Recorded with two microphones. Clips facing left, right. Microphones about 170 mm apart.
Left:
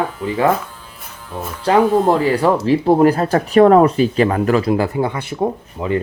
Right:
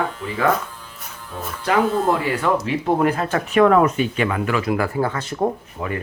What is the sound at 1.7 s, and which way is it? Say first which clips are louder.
Speech: left 5 dB; 35° left (ahead or behind).